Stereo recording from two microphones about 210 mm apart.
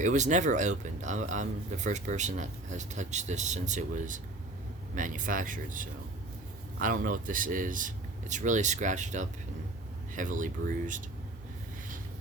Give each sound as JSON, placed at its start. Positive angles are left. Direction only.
{"t": 0.0, "sound": "speech", "side_deg": -35}